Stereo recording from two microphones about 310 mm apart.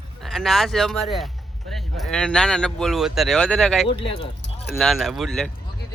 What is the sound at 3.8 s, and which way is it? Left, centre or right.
Speech, centre.